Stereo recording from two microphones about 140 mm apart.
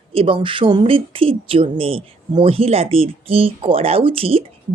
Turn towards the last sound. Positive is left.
turn(degrees=-40)  # may be behind; listen again after turning